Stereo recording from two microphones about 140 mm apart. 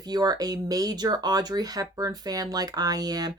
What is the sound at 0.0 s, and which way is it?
Speech, 30° right (ahead or behind).